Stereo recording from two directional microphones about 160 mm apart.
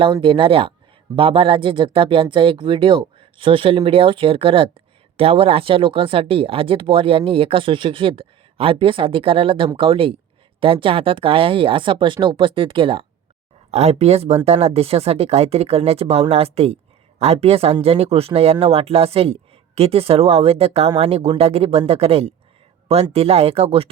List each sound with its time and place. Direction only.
0.0 s speech: 35° right (ahead or behind)